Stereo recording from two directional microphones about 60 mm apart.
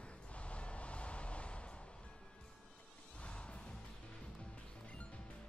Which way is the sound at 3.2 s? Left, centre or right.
Centre.